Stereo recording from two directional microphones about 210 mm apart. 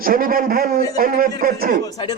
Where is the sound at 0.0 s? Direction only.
45° right (ahead or behind).